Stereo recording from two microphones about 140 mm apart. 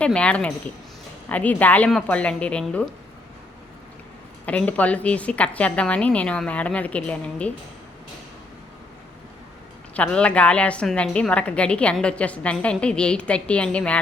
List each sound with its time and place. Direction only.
0.0 s a woman's voice: 10° left (ahead or behind)
4.4 s a woman's voice: 10° left (ahead or behind)
9.9 s a woman's voice: 10° left (ahead or behind)